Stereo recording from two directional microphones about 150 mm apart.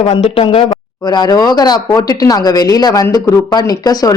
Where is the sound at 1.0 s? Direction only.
25° left (ahead or behind).